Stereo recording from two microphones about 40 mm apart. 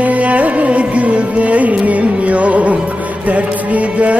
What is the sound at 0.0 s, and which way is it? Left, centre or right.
Carnatic music, right.